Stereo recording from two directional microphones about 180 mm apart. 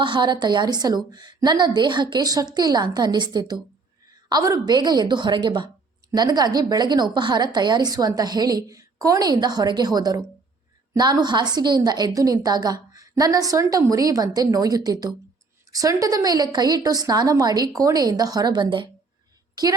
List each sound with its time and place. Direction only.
0.0 s a woman's voice: 25° right (ahead or behind)